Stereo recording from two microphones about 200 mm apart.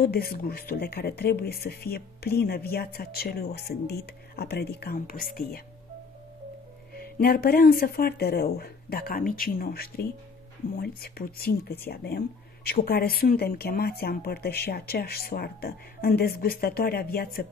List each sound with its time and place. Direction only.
0.0 s speech: 50° left (ahead or behind)
7.0 s speech: 50° left (ahead or behind)